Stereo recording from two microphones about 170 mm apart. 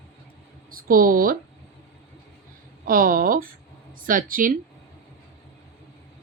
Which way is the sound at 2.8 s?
55° right (ahead or behind).